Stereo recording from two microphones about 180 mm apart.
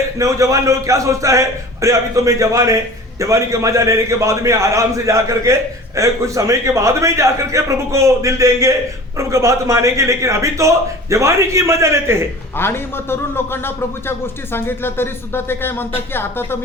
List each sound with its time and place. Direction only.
0.2 s a man's voice: 15° right (ahead or behind)
12.5 s a man's voice: 15° left (ahead or behind)